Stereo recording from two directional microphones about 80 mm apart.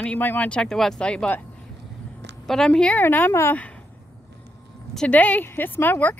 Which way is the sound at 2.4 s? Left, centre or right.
Centre.